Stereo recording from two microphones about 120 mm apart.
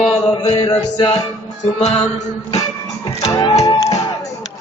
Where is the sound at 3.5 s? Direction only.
30° left (ahead or behind).